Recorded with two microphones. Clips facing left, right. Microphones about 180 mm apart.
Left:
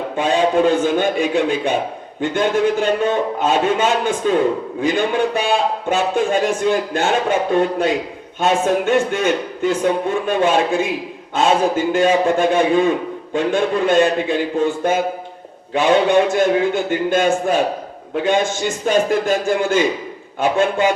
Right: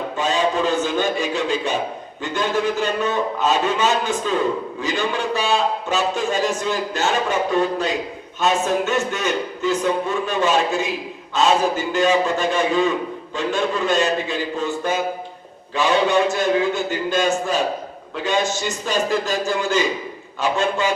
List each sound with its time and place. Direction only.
0.2 s a man's voice: 55° left (ahead or behind)